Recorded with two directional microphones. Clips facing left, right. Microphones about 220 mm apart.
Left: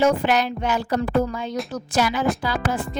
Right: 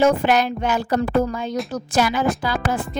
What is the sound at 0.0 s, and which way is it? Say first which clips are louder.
Speech: right 2 dB; 50° right (ahead or behind).